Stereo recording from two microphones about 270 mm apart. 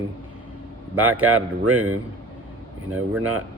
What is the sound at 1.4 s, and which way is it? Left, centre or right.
Speech, right.